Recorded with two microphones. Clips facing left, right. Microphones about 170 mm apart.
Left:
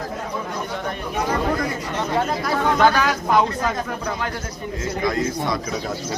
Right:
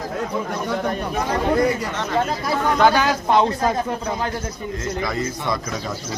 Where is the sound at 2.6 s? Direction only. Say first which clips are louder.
Right 1 dB; 5° right (ahead or behind).